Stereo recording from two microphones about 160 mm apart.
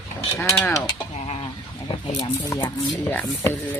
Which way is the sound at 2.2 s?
20° left (ahead or behind).